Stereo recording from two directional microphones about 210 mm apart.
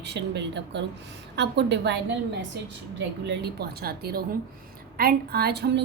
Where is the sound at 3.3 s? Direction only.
50° right (ahead or behind).